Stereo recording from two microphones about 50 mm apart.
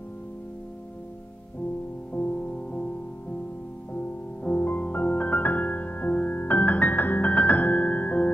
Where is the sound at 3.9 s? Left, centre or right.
Left.